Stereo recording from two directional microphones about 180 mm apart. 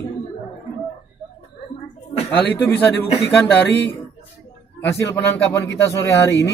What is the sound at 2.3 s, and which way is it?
A man's voice, 10° left (ahead or behind).